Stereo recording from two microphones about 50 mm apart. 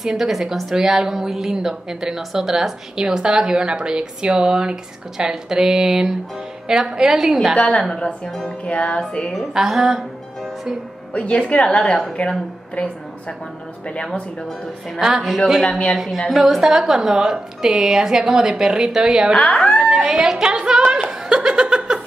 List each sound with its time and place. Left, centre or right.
0.0 s a woman's voice: centre
7.5 s speech: centre
8.6 s a woman's voice: left
9.5 s a woman's voice: centre
11.1 s a woman's voice: left
15.0 s a woman's voice: centre
19.3 s speech: centre
19.8 s speech: centre
21.3 s laughter: centre